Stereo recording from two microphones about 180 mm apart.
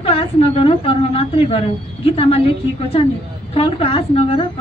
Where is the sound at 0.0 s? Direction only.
30° left (ahead or behind).